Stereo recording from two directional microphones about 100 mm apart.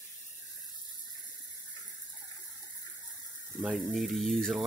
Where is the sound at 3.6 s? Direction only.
Centre (ahead or behind).